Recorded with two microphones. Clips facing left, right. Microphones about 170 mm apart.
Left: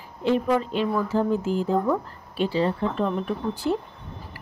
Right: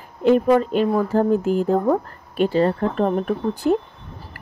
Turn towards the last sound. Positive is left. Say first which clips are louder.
# right 6 dB
turn(degrees=-55)  # may be behind; listen again after turning